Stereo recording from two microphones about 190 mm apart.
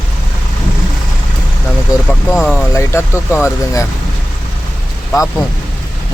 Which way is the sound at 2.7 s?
15° left (ahead or behind).